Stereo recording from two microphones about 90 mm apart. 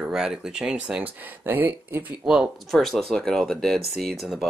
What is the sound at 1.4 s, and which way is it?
Speech, 25° right (ahead or behind).